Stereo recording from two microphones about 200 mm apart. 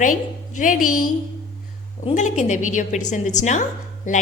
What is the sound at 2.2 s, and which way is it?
A woman's voice, 35° left (ahead or behind).